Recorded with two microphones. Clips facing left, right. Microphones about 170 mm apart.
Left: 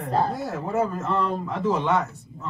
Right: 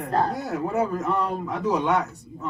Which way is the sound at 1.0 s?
15° right (ahead or behind).